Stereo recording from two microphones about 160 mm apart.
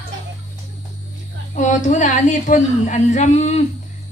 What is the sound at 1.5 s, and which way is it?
A woman's voice, 50° left (ahead or behind).